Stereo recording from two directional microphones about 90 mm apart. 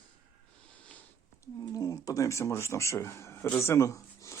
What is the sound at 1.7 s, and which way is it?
Speech, 40° left (ahead or behind).